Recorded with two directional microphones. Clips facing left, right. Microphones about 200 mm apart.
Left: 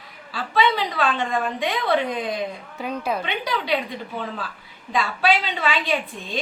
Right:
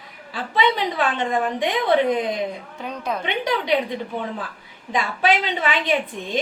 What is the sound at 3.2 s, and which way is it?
Speech, 20° right (ahead or behind).